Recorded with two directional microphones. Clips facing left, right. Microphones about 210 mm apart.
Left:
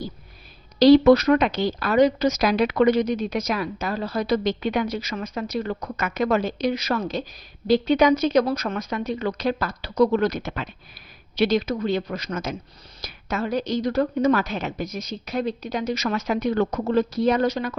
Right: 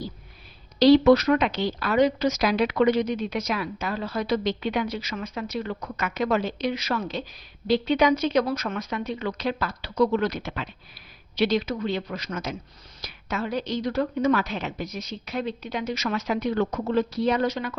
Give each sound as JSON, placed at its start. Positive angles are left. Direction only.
{"t": 0.8, "sound": "a woman's voice", "side_deg": 45}